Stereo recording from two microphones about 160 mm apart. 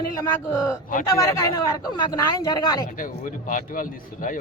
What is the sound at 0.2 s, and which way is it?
Speech, 20° left (ahead or behind).